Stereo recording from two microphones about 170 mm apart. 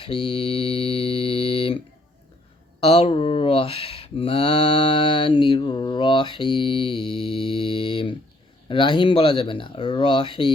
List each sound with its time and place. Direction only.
0.0 s mantra: 35° left (ahead or behind)
2.8 s mantra: 35° left (ahead or behind)
8.6 s speech: 30° left (ahead or behind)